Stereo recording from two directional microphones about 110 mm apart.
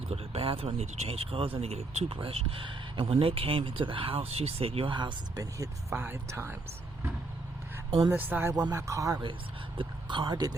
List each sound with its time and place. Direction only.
0.1 s speech: 60° right (ahead or behind)
2.1 s speech: 55° right (ahead or behind)
5.4 s speech: 25° right (ahead or behind)
7.9 s speech: 55° right (ahead or behind)
8.1 s speech: 15° right (ahead or behind)
8.7 s speech: 30° right (ahead or behind)
9.7 s speech: 45° right (ahead or behind)